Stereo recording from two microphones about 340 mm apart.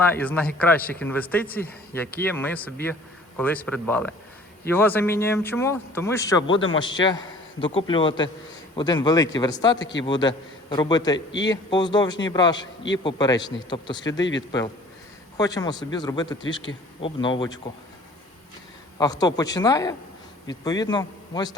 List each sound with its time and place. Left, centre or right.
0.0 s a man's voice: centre
6.5 s a man's voice: left
6.7 s a man's voice: centre
15.4 s a man's voice: centre
18.9 s a man's voice: centre